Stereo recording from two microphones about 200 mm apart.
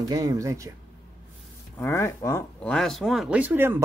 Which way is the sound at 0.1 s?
15° right (ahead or behind).